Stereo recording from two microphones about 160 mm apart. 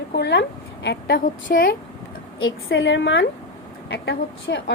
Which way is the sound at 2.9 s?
90° left.